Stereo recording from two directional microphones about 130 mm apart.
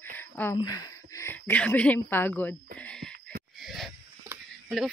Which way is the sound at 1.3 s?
15° left (ahead or behind).